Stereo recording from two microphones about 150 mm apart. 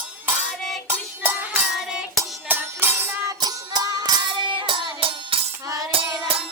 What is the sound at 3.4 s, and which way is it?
Music, 25° right (ahead or behind).